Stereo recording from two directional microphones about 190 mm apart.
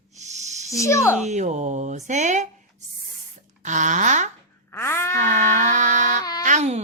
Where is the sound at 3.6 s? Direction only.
40° right (ahead or behind).